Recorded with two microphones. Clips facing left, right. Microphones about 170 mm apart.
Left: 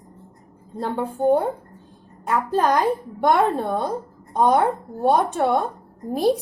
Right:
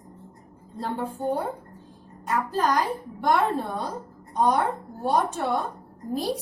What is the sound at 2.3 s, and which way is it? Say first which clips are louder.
A woman's voice: left 4 dB; 60° left (ahead or behind).